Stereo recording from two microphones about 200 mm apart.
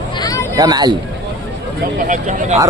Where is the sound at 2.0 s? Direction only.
40° right (ahead or behind).